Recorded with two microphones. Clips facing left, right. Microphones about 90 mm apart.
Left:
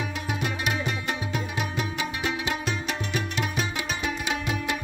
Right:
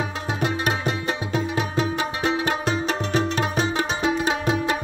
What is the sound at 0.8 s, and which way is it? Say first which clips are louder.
Music: right 4 dB; 30° right (ahead or behind).